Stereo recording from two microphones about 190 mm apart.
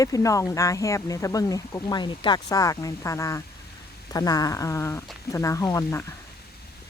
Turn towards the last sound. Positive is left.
turn(degrees=15)  # may be behind; listen again after turning